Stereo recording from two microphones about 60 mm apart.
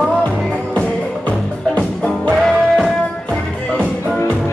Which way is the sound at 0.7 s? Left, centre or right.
Left.